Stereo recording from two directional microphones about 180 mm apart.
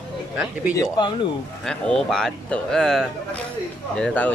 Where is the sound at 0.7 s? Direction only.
20° left (ahead or behind).